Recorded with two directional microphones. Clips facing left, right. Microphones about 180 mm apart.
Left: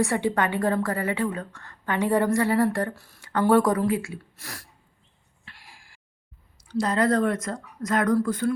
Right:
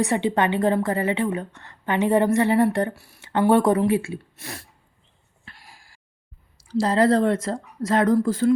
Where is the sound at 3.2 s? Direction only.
25° right (ahead or behind).